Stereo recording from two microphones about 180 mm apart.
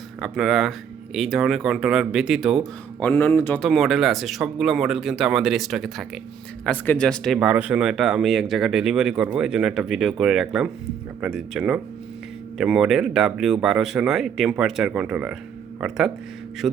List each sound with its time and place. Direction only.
0.2 s speech: centre (ahead or behind)
3.0 s speech: 10° left (ahead or behind)
7.3 s speech: 5° right (ahead or behind)